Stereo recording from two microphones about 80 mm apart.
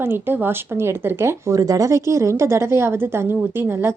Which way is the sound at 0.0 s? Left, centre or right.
Right.